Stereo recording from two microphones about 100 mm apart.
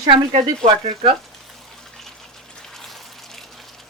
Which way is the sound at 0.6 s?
80° right.